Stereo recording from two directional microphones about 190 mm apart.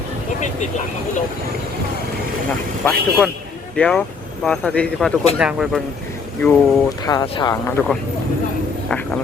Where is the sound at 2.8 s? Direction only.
Centre (ahead or behind).